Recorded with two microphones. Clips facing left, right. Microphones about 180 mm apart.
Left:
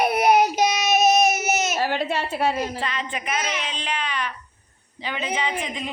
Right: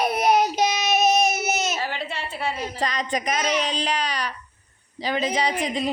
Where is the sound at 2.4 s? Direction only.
45° left (ahead or behind).